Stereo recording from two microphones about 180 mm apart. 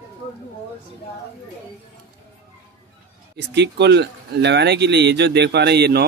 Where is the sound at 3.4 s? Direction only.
70° right (ahead or behind).